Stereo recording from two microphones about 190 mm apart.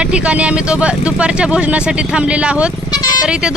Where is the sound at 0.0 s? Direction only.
5° right (ahead or behind).